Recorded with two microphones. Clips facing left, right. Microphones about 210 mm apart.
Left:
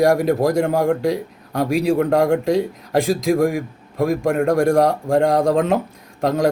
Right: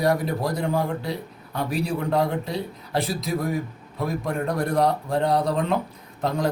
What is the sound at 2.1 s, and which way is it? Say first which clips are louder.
A man's voice: left 8 dB; 90° left.